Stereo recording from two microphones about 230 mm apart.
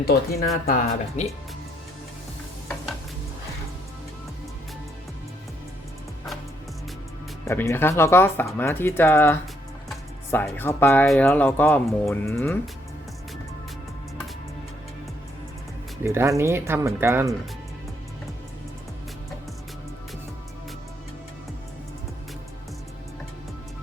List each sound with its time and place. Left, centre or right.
0.6 s speech: left
7.4 s speech: centre
16.0 s speech: centre